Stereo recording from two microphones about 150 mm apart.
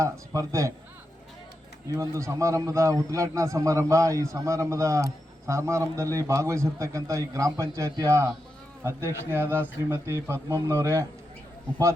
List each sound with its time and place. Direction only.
0.0 s a man's voice: 20° right (ahead or behind)
1.9 s a man's voice: 20° right (ahead or behind)